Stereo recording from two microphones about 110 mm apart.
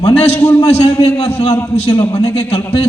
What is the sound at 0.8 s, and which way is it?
A man's voice, 40° left (ahead or behind).